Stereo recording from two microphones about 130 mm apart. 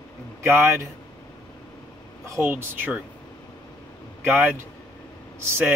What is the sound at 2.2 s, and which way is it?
Speech, 20° right (ahead or behind).